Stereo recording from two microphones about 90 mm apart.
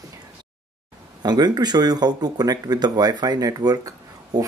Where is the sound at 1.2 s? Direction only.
50° right (ahead or behind).